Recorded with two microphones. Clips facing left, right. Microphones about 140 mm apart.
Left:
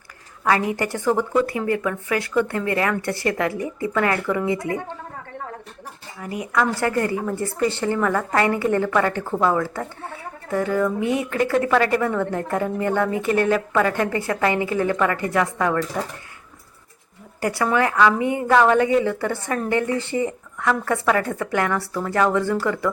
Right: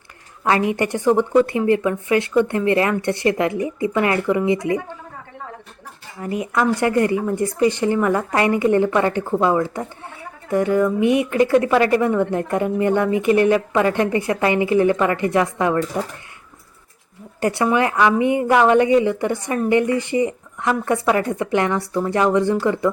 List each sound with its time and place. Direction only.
0.4 s a woman's voice: 20° right (ahead or behind)
6.1 s a woman's voice: 25° right (ahead or behind)
17.4 s a woman's voice: 20° right (ahead or behind)